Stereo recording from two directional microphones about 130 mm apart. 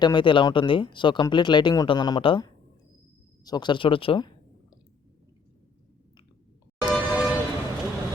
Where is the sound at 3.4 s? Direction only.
35° left (ahead or behind).